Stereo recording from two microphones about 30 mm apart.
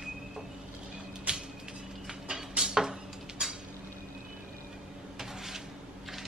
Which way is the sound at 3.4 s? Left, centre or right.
Right.